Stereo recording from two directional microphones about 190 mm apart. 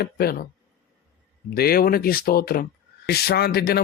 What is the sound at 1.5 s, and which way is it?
Speech, 50° left (ahead or behind).